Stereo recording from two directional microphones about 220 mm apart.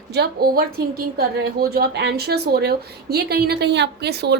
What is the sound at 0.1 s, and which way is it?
Speech, 45° right (ahead or behind).